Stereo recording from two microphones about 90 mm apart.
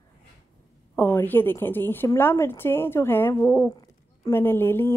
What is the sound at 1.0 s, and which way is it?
Speech, 25° left (ahead or behind).